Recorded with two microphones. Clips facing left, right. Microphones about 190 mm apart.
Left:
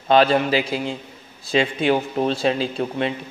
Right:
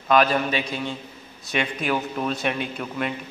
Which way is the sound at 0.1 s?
30° left (ahead or behind).